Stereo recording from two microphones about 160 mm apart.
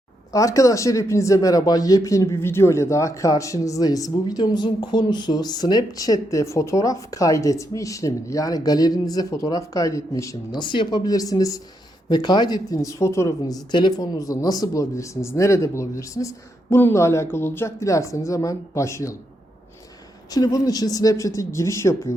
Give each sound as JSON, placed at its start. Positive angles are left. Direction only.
{"t": 0.3, "sound": "speech", "side_deg": 20}
{"t": 20.3, "sound": "speech", "side_deg": 25}